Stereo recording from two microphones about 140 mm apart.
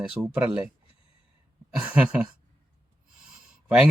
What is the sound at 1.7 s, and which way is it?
Speech, 10° right (ahead or behind).